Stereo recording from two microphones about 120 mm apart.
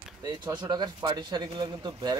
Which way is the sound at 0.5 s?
35° right (ahead or behind).